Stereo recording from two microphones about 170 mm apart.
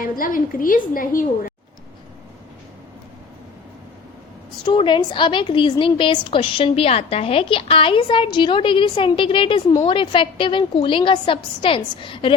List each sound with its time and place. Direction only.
0.0 s a woman's voice: 55° left (ahead or behind)
4.6 s a woman's voice: 30° left (ahead or behind)